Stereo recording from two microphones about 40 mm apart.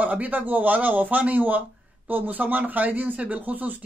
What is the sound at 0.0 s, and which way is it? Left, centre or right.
A man's voice, right.